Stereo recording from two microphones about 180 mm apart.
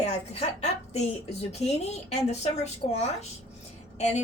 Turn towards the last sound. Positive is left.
turn(degrees=40)  # may be behind; listen again after turning